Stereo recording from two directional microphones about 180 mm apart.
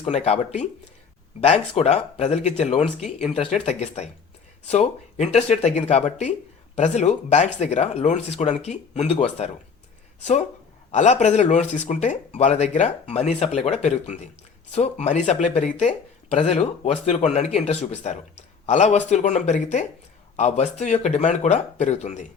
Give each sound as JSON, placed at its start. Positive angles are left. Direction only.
{"t": 0.0, "sound": "speech", "side_deg": 35}
{"t": 10.9, "sound": "speech", "side_deg": 40}